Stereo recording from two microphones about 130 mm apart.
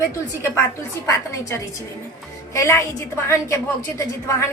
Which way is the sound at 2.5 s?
20° left (ahead or behind).